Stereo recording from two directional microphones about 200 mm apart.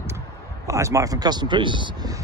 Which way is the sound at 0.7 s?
15° right (ahead or behind).